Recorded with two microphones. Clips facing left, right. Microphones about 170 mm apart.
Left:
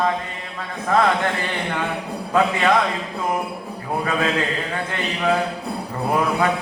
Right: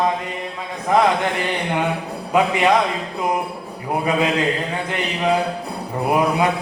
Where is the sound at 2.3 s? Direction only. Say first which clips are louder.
Right 1 dB; 15° right (ahead or behind).